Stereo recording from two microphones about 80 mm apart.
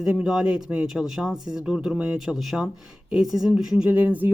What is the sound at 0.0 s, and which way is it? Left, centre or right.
Speech, centre.